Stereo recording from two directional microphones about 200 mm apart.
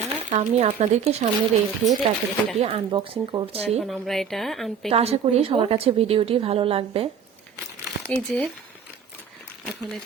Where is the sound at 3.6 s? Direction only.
Centre (ahead or behind).